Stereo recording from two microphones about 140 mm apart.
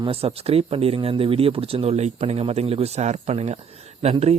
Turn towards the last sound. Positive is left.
turn(degrees=-50)  # may be behind; listen again after turning